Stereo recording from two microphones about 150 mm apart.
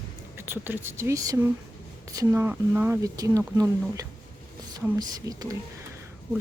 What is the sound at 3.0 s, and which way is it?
Speech, 25° right (ahead or behind).